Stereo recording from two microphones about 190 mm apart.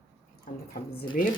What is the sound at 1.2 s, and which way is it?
Speech, 45° left (ahead or behind).